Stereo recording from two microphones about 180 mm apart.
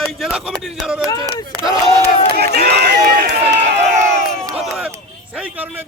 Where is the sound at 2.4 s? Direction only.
65° right (ahead or behind).